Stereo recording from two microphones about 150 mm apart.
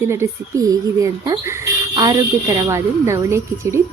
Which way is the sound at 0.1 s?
20° right (ahead or behind).